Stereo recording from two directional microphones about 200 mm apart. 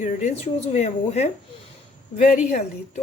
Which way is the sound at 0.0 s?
35° left (ahead or behind).